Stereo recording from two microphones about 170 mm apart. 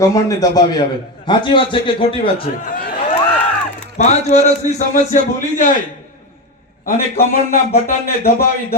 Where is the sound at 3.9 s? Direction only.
40° left (ahead or behind).